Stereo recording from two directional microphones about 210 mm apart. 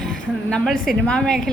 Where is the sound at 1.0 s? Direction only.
5° left (ahead or behind).